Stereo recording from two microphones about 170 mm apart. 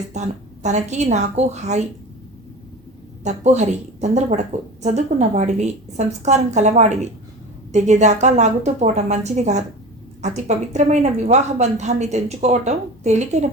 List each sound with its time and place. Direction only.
0.1 s a woman's voice: 45° right (ahead or behind)
3.2 s a woman's voice: 40° right (ahead or behind)